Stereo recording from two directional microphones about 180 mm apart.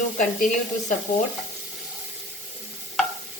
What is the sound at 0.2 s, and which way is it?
Stir, 45° left (ahead or behind).